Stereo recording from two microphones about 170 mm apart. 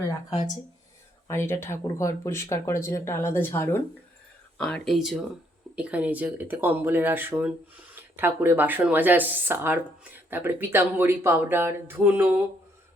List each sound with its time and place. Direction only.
1.3 s speech: 15° left (ahead or behind); by 12.4 s 10° right (ahead or behind)